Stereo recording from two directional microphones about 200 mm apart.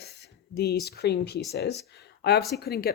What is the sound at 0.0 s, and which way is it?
Speech, 55° left (ahead or behind).